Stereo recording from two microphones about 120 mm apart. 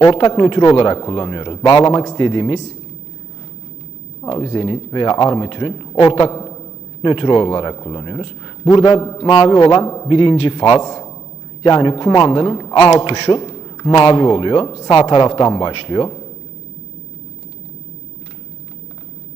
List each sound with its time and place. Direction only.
0.0 s speech: 50° left (ahead or behind)
0.9 s a man's voice: 40° left (ahead or behind)
4.3 s speech: 45° left (ahead or behind)
6.0 s speech: 50° left (ahead or behind)
6.3 s a sound: 30° left (ahead or behind)
7.0 s a man's voice: 45° left (ahead or behind)
10.1 s speech: 50° left (ahead or behind)
10.6 s a man's voice: 35° left (ahead or behind)
13.0 s speech: 55° left (ahead or behind)
13.4 s a sound: 35° left (ahead or behind)
14.0 s a man's voice: 40° left (ahead or behind)